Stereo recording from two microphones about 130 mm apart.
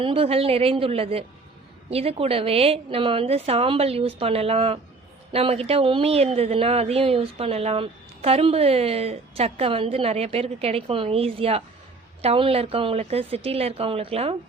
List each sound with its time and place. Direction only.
0.0 s speech: 50° right (ahead or behind)